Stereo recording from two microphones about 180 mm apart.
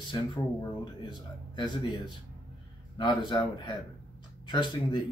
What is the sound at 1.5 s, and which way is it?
Speech, 25° left (ahead or behind).